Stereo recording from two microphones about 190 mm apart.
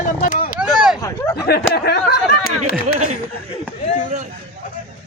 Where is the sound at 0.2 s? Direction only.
45° left (ahead or behind).